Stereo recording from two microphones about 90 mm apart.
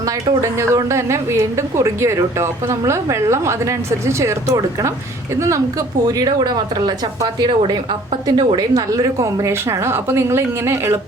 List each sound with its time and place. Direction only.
0.4 s a woman's voice: 30° right (ahead or behind)
6.1 s a woman's voice: 45° right (ahead or behind)